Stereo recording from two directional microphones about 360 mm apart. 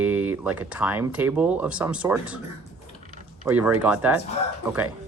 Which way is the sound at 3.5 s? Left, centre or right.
Centre.